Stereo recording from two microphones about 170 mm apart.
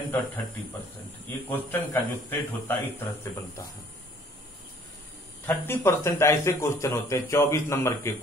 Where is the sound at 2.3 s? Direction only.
10° left (ahead or behind).